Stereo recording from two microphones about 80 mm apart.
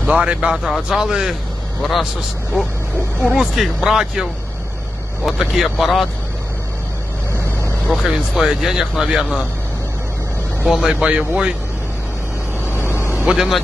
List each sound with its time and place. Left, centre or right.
0.0 s speech: centre
3.3 s speech: centre
7.9 s speech: centre
10.6 s speech: centre
13.1 s speech: centre